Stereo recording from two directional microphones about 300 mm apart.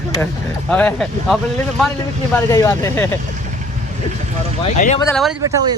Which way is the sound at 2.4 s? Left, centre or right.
Centre.